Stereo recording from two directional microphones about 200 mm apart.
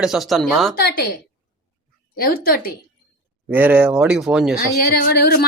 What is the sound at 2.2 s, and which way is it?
Speech, 45° left (ahead or behind).